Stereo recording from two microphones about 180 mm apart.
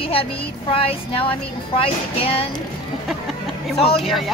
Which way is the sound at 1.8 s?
30° left (ahead or behind).